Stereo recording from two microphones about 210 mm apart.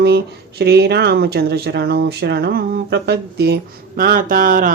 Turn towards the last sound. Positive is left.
turn(degrees=-40)  # may be behind; listen again after turning